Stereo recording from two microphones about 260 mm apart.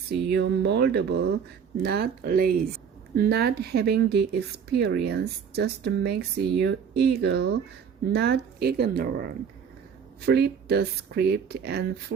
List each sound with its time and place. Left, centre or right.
0.1 s speech: right